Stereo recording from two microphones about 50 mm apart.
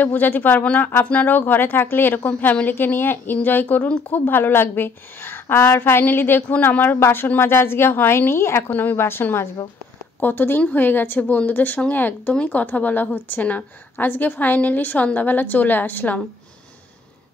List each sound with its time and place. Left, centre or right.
0.0 s a woman's voice: left
7.0 s a woman's voice: left
8.6 s a woman's voice: left
10.2 s a woman's voice: left
11.1 s a woman's voice: left